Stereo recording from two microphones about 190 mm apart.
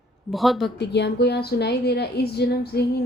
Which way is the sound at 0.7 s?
60° left (ahead or behind).